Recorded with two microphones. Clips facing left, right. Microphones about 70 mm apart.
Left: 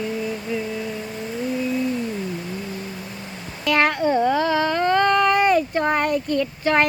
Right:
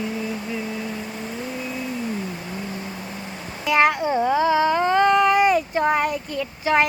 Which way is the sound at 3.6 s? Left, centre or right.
Centre.